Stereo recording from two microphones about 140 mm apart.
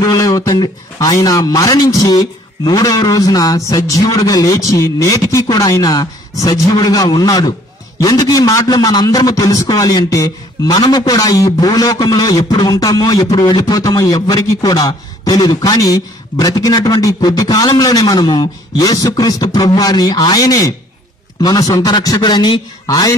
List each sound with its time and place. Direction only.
0.0 s a man's voice: 25° left (ahead or behind)